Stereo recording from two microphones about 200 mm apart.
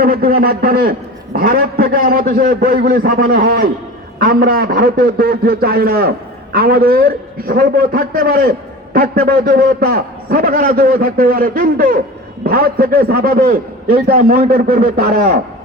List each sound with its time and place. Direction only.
0.0 s a man's voice: 45° right (ahead or behind)